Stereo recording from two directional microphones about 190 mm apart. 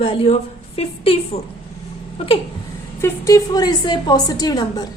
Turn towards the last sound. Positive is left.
turn(degrees=20)  # may be behind; listen again after turning